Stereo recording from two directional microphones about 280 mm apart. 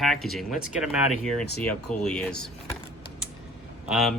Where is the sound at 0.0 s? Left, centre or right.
Centre.